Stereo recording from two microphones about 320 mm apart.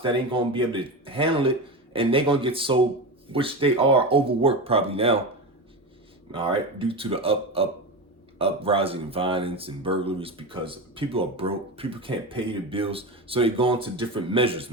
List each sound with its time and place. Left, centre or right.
0.0 s speech: centre
6.3 s speech: centre